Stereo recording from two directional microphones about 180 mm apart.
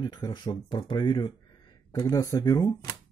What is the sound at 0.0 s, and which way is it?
Speech, 20° left (ahead or behind).